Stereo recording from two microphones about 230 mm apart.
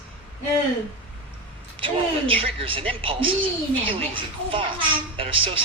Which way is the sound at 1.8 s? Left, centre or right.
Right.